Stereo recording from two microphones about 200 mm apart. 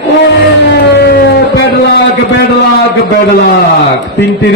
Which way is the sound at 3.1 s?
60° left (ahead or behind).